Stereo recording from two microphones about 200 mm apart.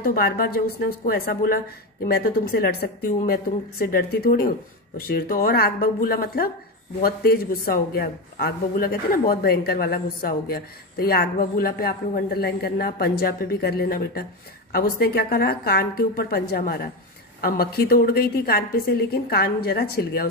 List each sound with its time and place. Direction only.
0.0 s a woman's voice: 50° left (ahead or behind)